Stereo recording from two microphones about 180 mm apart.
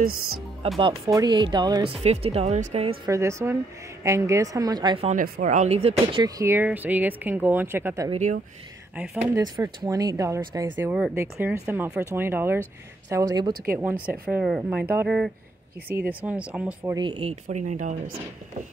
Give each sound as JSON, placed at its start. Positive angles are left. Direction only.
{"t": 1.0, "sound": "speech", "side_deg": -20}
{"t": 2.0, "sound": "speech", "side_deg": -35}
{"t": 3.1, "sound": "speech", "side_deg": -15}
{"t": 5.0, "sound": "speech", "side_deg": -45}
{"t": 6.2, "sound": "speech", "side_deg": -15}
{"t": 8.1, "sound": "speech", "side_deg": -40}
{"t": 8.9, "sound": "speech", "side_deg": -5}
{"t": 9.3, "sound": "speech", "side_deg": -20}
{"t": 14.3, "sound": "speech", "side_deg": 0}
{"t": 16.9, "sound": "speech", "side_deg": -30}